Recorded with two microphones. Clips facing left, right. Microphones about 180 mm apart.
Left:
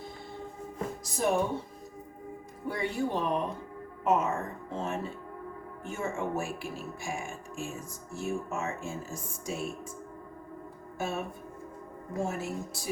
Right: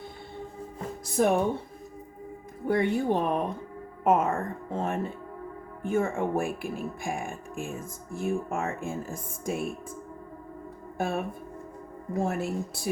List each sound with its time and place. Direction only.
1.1 s a woman's voice: 60° right (ahead or behind)
2.6 s speech: 55° right (ahead or behind)
10.9 s speech: 55° right (ahead or behind)
12.2 s a woman's voice: 55° right (ahead or behind)